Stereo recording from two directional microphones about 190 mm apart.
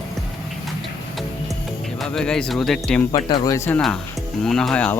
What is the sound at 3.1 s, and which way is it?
Speech, 20° left (ahead or behind).